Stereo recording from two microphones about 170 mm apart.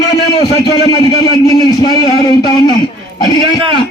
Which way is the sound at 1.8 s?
20° left (ahead or behind).